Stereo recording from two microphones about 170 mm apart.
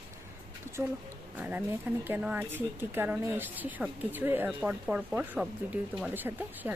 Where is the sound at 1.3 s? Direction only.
10° right (ahead or behind).